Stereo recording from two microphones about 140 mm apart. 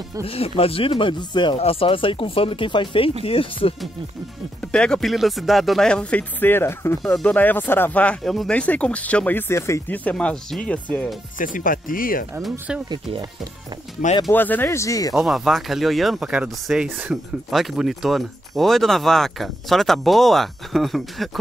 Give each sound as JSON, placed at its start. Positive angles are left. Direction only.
{"t": 0.2, "sound": "speech", "side_deg": 45}
{"t": 4.7, "sound": "speech", "side_deg": 5}
{"t": 7.0, "sound": "speech", "side_deg": 5}
{"t": 11.3, "sound": "speech", "side_deg": 75}
{"t": 12.4, "sound": "speech", "side_deg": -5}
{"t": 14.3, "sound": "speech", "side_deg": 15}
{"t": 15.1, "sound": "speech", "side_deg": 0}